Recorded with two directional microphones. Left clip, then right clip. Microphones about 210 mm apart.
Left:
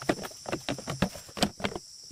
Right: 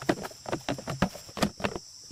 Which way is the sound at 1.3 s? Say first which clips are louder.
Left 2 dB; 15° right (ahead or behind).